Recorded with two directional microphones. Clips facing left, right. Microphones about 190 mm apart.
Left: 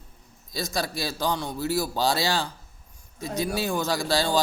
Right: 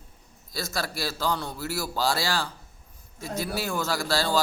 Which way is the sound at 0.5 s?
15° left (ahead or behind).